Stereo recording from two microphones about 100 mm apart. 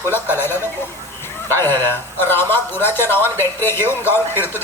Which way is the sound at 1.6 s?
25° left (ahead or behind).